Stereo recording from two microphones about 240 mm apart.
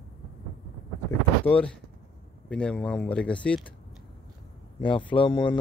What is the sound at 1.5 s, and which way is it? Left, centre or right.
Speech, centre.